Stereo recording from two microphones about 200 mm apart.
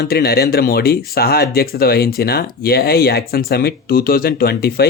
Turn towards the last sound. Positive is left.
turn(degrees=50)  # may be behind; listen again after turning